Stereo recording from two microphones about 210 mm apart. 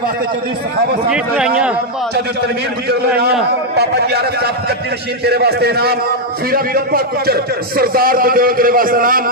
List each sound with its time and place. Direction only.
1.0 s speech: 5° right (ahead or behind)
3.7 s a man's voice: 50° right (ahead or behind)